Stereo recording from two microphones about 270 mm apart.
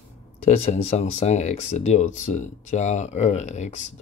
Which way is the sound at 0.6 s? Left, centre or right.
Left.